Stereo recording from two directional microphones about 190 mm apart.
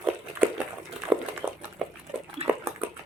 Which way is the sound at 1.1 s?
5° right (ahead or behind).